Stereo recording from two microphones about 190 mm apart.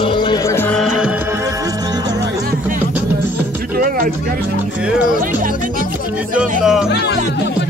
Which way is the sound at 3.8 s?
45° right (ahead or behind).